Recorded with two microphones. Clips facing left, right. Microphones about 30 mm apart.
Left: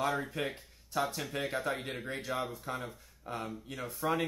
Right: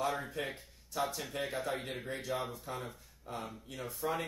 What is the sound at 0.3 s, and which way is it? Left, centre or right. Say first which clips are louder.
Speech: left 3 dB; centre.